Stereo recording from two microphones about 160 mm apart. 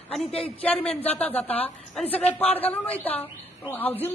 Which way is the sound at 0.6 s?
10° left (ahead or behind).